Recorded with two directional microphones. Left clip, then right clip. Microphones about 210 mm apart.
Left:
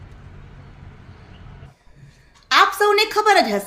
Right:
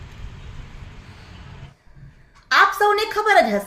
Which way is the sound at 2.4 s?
55° left (ahead or behind).